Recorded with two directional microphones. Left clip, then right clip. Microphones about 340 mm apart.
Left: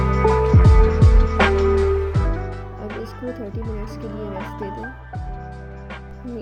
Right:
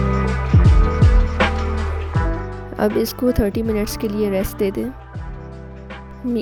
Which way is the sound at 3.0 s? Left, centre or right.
Right.